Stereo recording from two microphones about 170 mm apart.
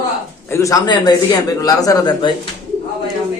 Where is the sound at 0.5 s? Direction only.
20° left (ahead or behind).